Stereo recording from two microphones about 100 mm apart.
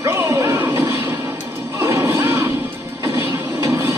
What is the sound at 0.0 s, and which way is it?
Music, 25° right (ahead or behind).